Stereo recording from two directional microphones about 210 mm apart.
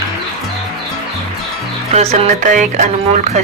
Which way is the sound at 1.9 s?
35° right (ahead or behind).